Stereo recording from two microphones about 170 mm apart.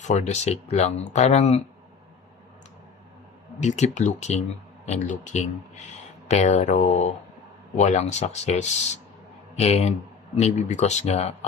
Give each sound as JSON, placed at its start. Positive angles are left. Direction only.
{"t": 0.0, "sound": "speech", "side_deg": 40}
{"t": 3.6, "sound": "speech", "side_deg": 45}